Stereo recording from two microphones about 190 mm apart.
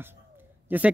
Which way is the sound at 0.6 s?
10° right (ahead or behind).